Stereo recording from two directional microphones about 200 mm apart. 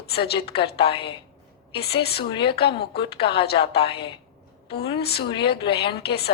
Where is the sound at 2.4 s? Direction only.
55° left (ahead or behind).